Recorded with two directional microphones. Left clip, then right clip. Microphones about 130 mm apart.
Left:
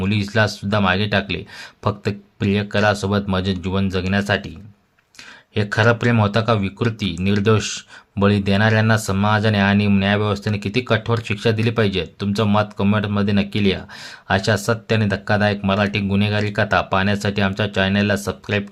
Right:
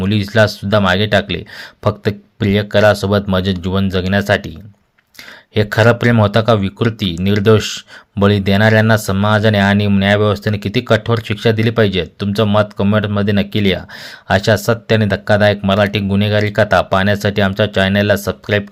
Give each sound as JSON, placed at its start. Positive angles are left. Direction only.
{"t": 0.0, "sound": "speech", "side_deg": -35}
{"t": 5.5, "sound": "speech", "side_deg": -40}